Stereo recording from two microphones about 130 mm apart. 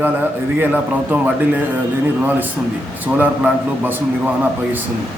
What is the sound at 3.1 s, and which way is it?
Speech, 15° right (ahead or behind).